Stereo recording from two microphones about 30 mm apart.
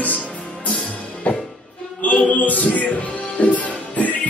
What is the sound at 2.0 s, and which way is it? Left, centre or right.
Music, left.